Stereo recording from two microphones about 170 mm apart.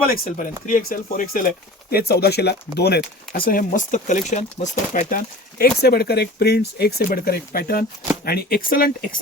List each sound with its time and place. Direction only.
0.7 s speech: 50° left (ahead or behind)